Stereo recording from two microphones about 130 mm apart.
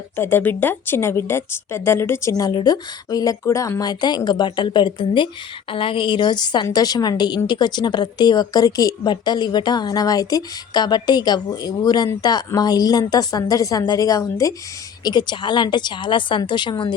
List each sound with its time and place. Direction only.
0.2 s a woman's voice: 15° left (ahead or behind); by 16.9 s 35° left (ahead or behind)